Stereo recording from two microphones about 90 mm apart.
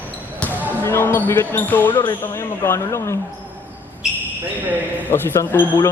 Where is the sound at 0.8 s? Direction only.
25° left (ahead or behind).